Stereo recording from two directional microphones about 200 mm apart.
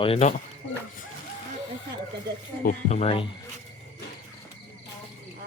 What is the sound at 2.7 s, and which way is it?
Speech, 35° left (ahead or behind).